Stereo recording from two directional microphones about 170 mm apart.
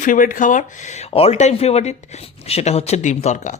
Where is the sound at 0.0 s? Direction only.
50° left (ahead or behind).